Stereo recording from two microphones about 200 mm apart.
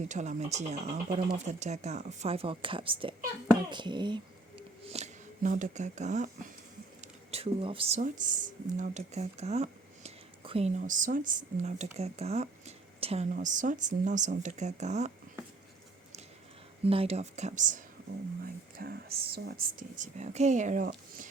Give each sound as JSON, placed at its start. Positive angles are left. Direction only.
{"t": 0.1, "sound": "a child's voice", "side_deg": -35}
{"t": 4.9, "sound": "speech", "side_deg": -35}
{"t": 16.8, "sound": "speech", "side_deg": -30}
{"t": 18.4, "sound": "speech", "side_deg": -50}